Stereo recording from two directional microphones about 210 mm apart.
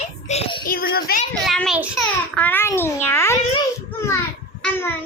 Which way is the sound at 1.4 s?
Centre (ahead or behind).